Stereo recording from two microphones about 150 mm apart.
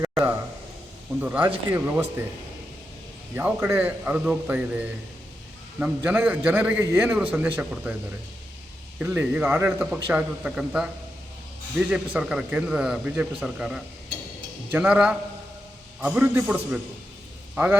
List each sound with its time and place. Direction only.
0.0 s a sound: 20° right (ahead or behind)
1.2 s a man's voice: 10° right (ahead or behind)
3.3 s a man's voice: 15° right (ahead or behind)
6.0 s a man's voice: 10° right (ahead or behind)
9.1 s a man's voice: 15° right (ahead or behind)